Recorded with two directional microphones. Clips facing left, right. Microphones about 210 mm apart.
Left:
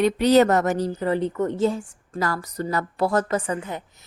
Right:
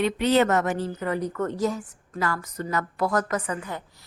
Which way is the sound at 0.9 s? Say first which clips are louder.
Left 4 dB; 30° left (ahead or behind).